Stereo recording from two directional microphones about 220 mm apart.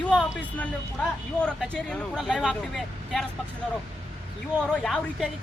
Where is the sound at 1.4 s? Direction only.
5° left (ahead or behind).